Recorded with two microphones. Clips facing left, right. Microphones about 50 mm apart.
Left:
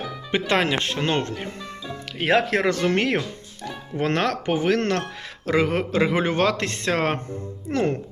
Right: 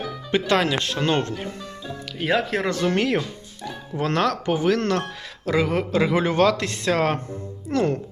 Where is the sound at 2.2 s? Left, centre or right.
Left.